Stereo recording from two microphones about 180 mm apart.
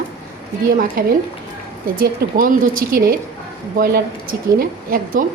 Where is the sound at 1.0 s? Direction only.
55° right (ahead or behind).